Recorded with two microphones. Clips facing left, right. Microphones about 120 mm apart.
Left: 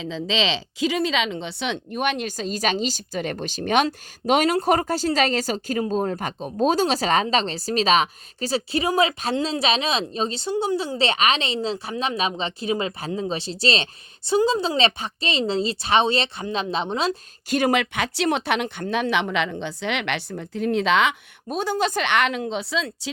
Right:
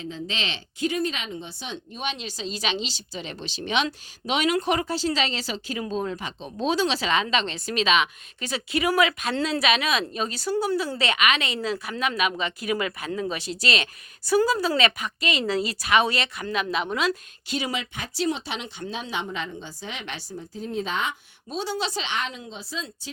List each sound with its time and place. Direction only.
0.0 s speech: 90° left; by 17.2 s 30° left (ahead or behind)
17.5 s speech: 55° left (ahead or behind); by 21.2 s 80° left
21.5 s speech: 50° left (ahead or behind); by 22.9 s 75° left (ahead or behind)